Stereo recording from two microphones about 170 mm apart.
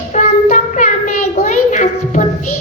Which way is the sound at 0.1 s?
50° left (ahead or behind).